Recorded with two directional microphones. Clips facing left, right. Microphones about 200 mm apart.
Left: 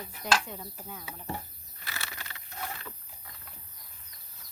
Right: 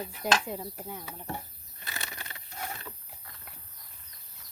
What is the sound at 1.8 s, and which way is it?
Bird flight, 20° right (ahead or behind).